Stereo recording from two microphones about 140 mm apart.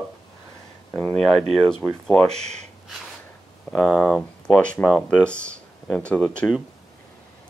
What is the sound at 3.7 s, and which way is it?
Speech, 5° left (ahead or behind).